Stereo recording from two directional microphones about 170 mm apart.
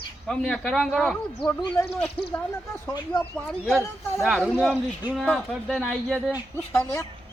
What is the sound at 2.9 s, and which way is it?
Speech, 20° left (ahead or behind).